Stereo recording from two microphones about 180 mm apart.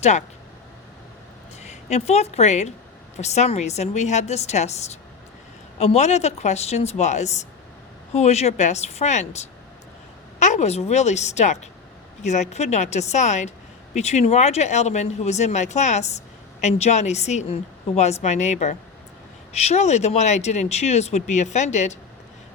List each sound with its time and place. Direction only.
0.0 s speech: 40° left (ahead or behind)
1.6 s a woman's voice: 40° left (ahead or behind)